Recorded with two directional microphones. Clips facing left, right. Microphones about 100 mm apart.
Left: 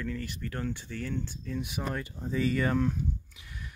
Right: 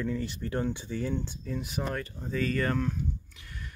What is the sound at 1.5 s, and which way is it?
Speech, centre (ahead or behind).